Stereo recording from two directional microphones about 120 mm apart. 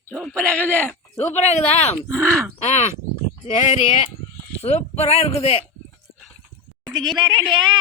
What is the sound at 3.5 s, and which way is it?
Speech, 90° left.